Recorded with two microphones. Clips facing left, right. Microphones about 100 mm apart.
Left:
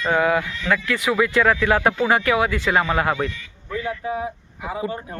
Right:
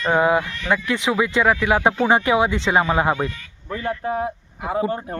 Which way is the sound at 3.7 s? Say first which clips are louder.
Right 1 dB; 45° right (ahead or behind).